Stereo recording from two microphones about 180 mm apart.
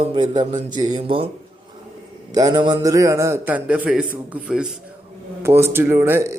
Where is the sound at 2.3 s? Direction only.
20° right (ahead or behind).